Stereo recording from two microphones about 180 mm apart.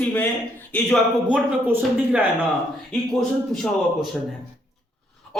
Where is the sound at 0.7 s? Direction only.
5° left (ahead or behind).